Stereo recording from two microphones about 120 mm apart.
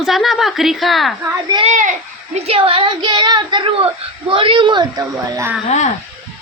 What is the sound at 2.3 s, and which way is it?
Speech, 55° right (ahead or behind).